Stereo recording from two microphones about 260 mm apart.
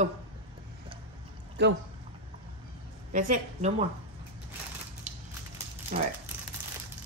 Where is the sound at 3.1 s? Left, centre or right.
Right.